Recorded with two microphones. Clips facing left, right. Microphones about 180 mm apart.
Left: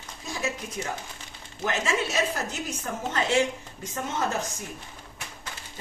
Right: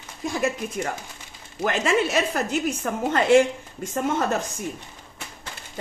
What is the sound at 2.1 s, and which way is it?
Speech, 65° right (ahead or behind).